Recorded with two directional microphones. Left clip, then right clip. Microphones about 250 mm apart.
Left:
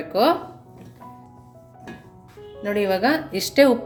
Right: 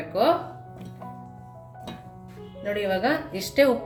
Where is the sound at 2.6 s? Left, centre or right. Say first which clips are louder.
Left 4 dB; left.